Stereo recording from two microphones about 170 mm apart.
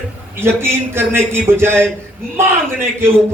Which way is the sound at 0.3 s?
15° right (ahead or behind).